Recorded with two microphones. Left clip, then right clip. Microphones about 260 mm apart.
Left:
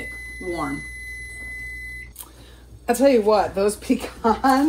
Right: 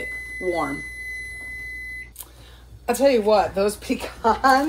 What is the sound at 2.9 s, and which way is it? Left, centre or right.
Speech, left.